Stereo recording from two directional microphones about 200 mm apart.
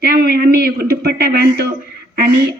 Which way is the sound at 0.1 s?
45° right (ahead or behind).